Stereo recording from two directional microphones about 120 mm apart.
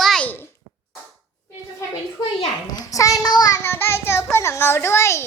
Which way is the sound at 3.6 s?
20° left (ahead or behind).